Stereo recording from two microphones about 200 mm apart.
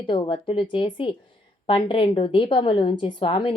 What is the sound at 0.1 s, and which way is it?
A woman's voice, 25° left (ahead or behind).